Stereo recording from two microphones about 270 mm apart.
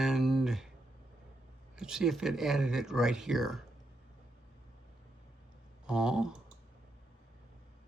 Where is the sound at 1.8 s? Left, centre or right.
Centre.